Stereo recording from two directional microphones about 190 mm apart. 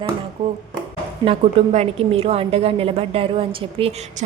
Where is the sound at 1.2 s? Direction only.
30° right (ahead or behind).